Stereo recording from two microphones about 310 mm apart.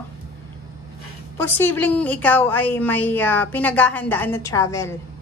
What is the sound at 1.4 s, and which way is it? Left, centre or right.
A woman's voice, centre.